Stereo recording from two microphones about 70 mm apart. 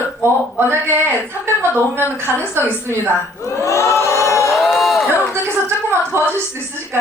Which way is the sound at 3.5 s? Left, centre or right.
Left.